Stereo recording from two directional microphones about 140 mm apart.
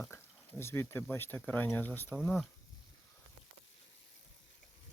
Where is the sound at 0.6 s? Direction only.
20° left (ahead or behind).